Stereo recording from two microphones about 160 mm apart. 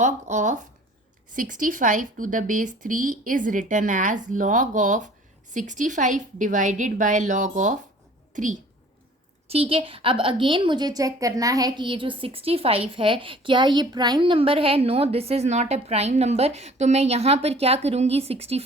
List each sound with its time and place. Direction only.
0.0 s a woman's voice: 50° right (ahead or behind)
9.5 s a woman's voice: 35° right (ahead or behind)